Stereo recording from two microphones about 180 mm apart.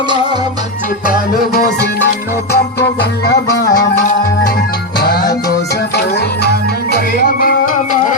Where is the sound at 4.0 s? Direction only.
50° left (ahead or behind).